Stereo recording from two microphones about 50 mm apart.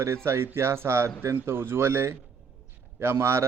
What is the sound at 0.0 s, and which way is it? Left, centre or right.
Speech, right.